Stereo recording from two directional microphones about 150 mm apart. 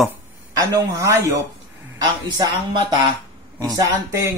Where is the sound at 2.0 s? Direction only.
30° right (ahead or behind).